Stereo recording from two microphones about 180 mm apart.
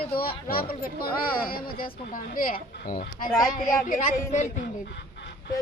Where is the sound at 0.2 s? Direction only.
55° left (ahead or behind).